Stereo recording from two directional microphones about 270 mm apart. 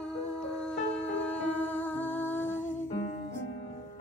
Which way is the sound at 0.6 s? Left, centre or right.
Centre.